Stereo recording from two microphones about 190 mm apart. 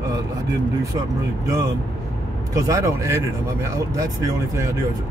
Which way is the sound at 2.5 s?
15° right (ahead or behind).